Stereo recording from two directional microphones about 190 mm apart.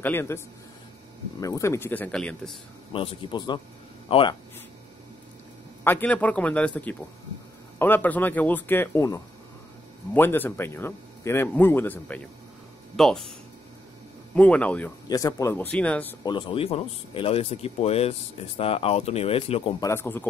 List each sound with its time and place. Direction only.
0.0 s a man's voice: 10° left (ahead or behind)
1.4 s a man's voice: 15° left (ahead or behind)
2.9 s speech: 25° left (ahead or behind)
5.9 s a man's voice: 10° left (ahead or behind)
14.3 s a man's voice: 5° left (ahead or behind)
15.0 s speech: 20° left (ahead or behind)
15.7 s a man's voice: 5° left (ahead or behind)
16.3 s speech: 25° left (ahead or behind)
19.8 s a man's voice: 15° left (ahead or behind)